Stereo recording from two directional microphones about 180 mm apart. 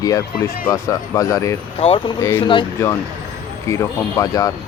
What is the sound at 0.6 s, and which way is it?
Speech, 15° left (ahead or behind).